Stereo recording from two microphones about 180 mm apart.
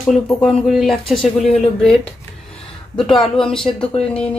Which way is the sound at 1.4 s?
35° left (ahead or behind).